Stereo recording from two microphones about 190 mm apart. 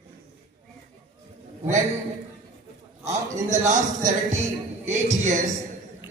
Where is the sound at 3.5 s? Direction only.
40° right (ahead or behind).